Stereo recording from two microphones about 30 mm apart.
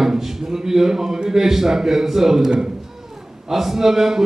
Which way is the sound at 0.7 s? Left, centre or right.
Centre.